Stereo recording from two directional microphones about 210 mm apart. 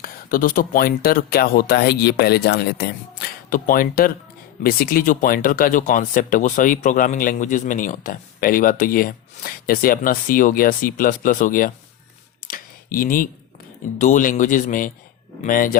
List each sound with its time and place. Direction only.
0.0 s speech: 40° left (ahead or behind)
12.5 s computer keyboard: 40° left (ahead or behind)
14.0 s speech: 35° left (ahead or behind)